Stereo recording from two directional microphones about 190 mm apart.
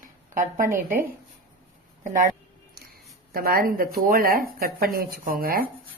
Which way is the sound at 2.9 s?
50° right (ahead or behind).